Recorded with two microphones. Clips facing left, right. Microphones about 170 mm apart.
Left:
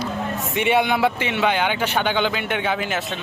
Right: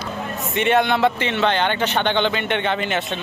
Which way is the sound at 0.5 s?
10° left (ahead or behind).